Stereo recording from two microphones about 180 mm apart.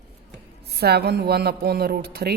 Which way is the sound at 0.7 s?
65° right (ahead or behind).